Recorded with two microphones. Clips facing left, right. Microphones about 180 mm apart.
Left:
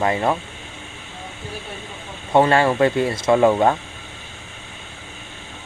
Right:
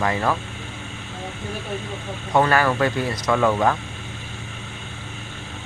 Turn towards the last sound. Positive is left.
turn(degrees=25)  # may be behind; listen again after turning